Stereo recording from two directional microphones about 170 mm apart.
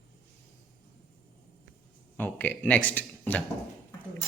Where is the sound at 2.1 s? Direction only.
10° left (ahead or behind).